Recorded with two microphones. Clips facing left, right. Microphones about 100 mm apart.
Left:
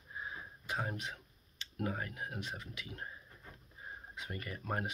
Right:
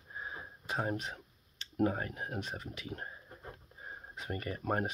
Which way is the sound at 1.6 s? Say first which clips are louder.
Right 7 dB; 35° right (ahead or behind).